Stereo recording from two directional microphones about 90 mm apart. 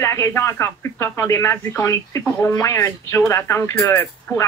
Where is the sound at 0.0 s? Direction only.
30° left (ahead or behind).